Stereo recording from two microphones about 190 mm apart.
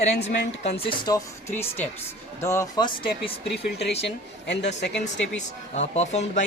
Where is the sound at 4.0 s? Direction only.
65° left (ahead or behind).